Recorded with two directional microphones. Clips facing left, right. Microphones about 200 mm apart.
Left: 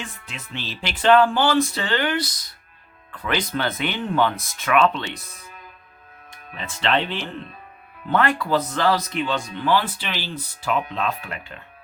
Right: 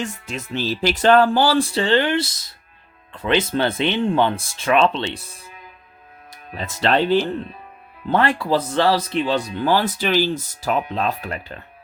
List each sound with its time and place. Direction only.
0.0 s speech: 45° right (ahead or behind)